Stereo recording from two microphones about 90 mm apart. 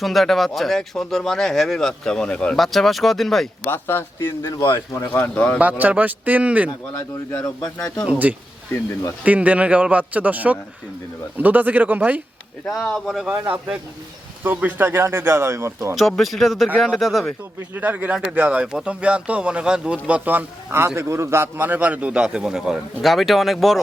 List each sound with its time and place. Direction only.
0.0 s speech: centre (ahead or behind)
2.6 s speech: centre (ahead or behind)
3.7 s a man's voice: 25° left (ahead or behind)
5.3 s speech: 10° left (ahead or behind)
5.5 s speech: 20° right (ahead or behind)
7.8 s speech: 10° left (ahead or behind)
8.0 s speech: 15° right (ahead or behind)
12.8 s speech: centre (ahead or behind)
13.3 s speech: 20° right (ahead or behind)
16.0 s speech: centre (ahead or behind)
17.7 s speech: 20° right (ahead or behind); by 23.8 s centre (ahead or behind)